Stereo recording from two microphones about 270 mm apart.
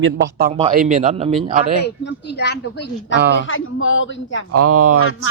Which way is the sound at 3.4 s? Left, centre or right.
Left.